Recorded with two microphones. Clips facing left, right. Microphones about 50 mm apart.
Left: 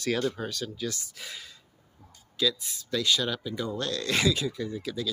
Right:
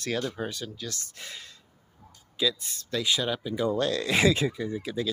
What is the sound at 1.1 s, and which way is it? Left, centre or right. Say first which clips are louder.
Speech: even; centre.